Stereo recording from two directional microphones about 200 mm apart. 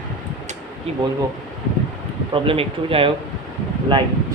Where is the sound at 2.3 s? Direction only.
25° right (ahead or behind).